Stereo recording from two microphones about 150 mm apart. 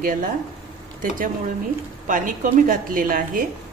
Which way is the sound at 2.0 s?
60° right (ahead or behind).